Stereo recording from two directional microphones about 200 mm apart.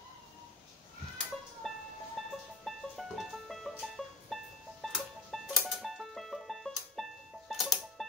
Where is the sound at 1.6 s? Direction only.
Centre (ahead or behind).